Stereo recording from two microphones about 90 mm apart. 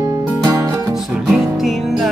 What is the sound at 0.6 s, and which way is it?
Music, 30° right (ahead or behind).